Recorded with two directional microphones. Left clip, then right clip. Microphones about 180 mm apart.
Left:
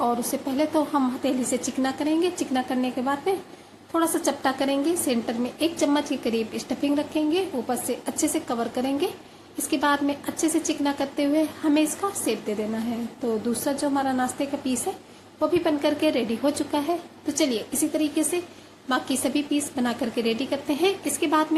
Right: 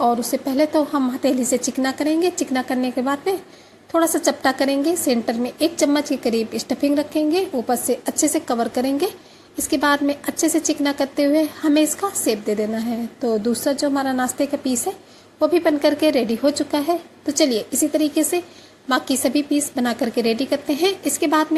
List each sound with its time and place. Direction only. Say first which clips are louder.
0.0 s a woman's voice: right 6 dB; 30° right (ahead or behind)